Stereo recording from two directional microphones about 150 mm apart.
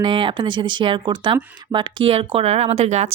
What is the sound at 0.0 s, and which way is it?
Speech, 30° right (ahead or behind).